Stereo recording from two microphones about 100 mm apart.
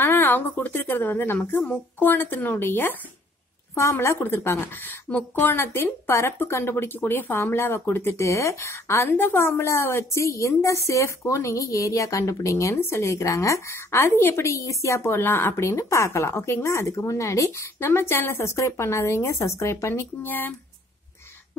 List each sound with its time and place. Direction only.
0.0 s a woman's voice: 20° left (ahead or behind)